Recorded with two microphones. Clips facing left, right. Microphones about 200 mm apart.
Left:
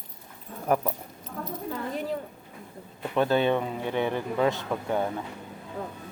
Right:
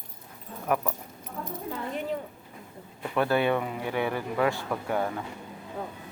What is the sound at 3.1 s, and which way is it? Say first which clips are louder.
Speech: left 1 dB; 20° left (ahead or behind).